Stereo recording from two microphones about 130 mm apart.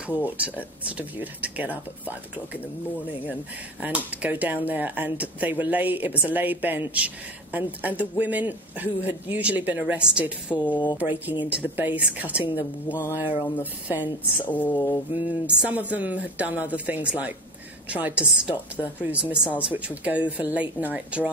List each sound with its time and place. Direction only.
0.1 s speech: 10° right (ahead or behind)
3.8 s speech: 10° right (ahead or behind)
10.7 s speech: 35° left (ahead or behind)
11.0 s speech: 15° right (ahead or behind)
13.8 s speech: 10° right (ahead or behind)
14.4 s speech: 15° left (ahead or behind)
14.7 s speech: 30° left (ahead or behind)
15.2 s speech: 10° right (ahead or behind)